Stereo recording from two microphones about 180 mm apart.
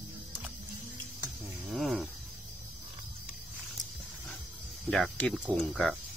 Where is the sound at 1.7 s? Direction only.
5° right (ahead or behind).